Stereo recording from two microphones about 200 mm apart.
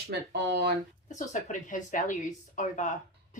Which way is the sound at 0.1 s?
55° right (ahead or behind).